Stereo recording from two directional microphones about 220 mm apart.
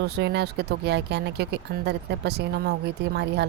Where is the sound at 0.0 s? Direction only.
50° right (ahead or behind).